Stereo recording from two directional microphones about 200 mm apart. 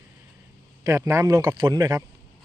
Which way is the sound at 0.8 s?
15° right (ahead or behind).